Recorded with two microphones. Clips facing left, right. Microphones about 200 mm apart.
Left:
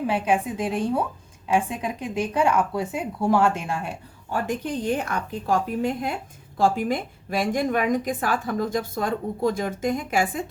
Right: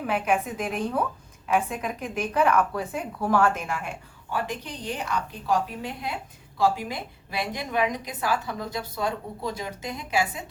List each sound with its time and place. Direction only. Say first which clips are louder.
0.1 s speech: right 1 dB; 30° left (ahead or behind)
4.3 s a woman's voice: left 5 dB; 45° left (ahead or behind)